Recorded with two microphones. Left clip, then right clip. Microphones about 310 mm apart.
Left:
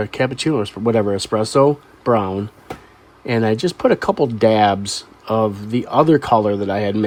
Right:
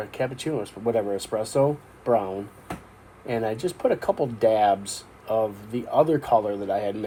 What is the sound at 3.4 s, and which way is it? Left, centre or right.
Speech, left.